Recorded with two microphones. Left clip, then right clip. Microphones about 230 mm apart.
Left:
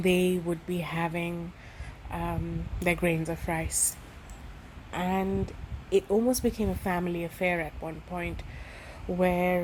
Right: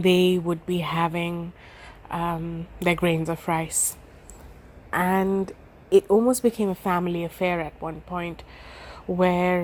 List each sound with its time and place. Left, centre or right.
0.0 s speech: right
4.9 s speech: right